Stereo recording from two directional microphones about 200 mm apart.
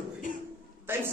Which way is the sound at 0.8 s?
10° right (ahead or behind).